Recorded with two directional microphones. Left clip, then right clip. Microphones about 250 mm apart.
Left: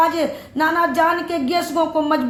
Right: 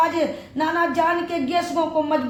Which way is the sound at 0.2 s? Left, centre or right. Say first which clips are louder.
Left 3 dB; left.